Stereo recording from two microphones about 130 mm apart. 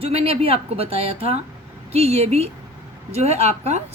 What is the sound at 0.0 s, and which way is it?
A woman's voice, 50° right (ahead or behind).